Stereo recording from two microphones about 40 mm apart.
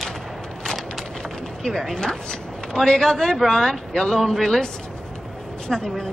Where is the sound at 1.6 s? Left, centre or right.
Centre.